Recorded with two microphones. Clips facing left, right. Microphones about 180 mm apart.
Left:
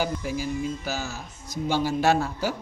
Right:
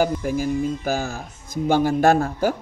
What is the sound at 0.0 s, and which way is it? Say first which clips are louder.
Speech: right 6 dB; 50° right (ahead or behind).